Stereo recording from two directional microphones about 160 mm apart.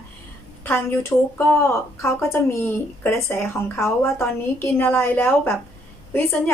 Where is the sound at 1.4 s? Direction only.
15° left (ahead or behind).